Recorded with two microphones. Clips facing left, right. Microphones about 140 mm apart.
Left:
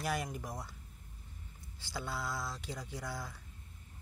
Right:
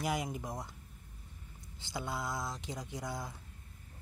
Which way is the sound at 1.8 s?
20° right (ahead or behind).